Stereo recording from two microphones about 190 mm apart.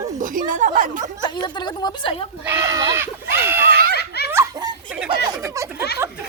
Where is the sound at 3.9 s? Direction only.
60° left (ahead or behind).